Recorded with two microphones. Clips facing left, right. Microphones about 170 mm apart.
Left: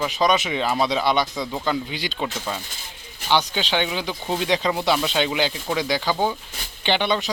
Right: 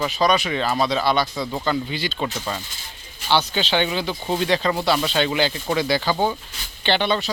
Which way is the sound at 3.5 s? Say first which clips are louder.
Right 2 dB; 5° left (ahead or behind).